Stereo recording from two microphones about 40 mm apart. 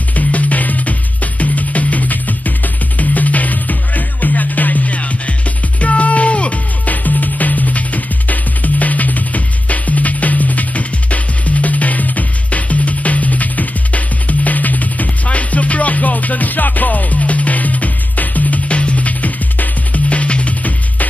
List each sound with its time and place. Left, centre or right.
0.1 s music: left
6.9 s music: left